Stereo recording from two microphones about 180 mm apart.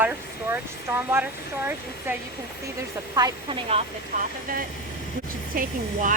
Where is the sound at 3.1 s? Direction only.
25° right (ahead or behind).